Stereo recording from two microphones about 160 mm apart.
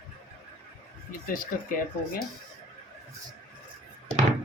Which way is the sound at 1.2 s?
60° left (ahead or behind).